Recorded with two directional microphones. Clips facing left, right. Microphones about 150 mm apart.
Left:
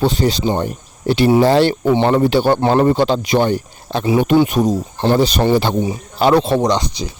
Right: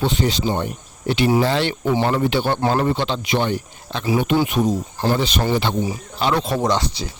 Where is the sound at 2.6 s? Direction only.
25° left (ahead or behind).